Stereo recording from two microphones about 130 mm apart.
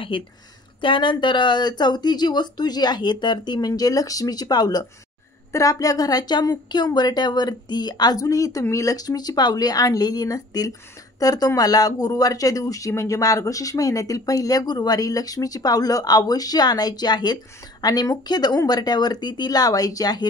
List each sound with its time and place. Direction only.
0.1 s speech: 45° left (ahead or behind)